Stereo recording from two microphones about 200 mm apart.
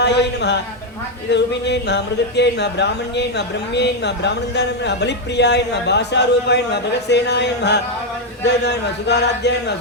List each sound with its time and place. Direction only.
0.0 s a man's voice: 60° left (ahead or behind)